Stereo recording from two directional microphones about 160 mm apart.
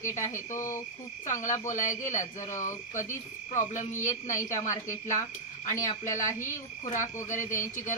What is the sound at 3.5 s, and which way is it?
Speech, 50° left (ahead or behind).